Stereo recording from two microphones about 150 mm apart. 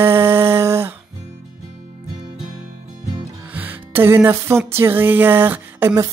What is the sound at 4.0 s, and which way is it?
Speech, 15° right (ahead or behind).